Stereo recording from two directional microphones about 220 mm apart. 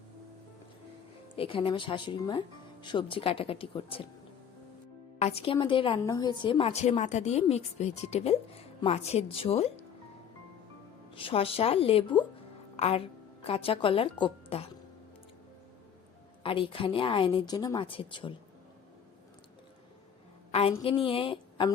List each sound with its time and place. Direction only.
1.4 s a woman's voice: 25° left (ahead or behind)
5.2 s a woman's voice: 25° left (ahead or behind)
11.1 s a woman's voice: 25° left (ahead or behind)
16.4 s a woman's voice: 25° left (ahead or behind)
20.5 s a woman's voice: 25° left (ahead or behind)